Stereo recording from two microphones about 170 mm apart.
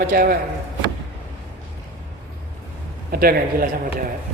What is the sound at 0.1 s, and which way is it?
Speech, 60° right (ahead or behind).